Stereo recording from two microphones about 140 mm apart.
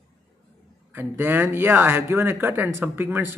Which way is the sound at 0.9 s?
15° right (ahead or behind).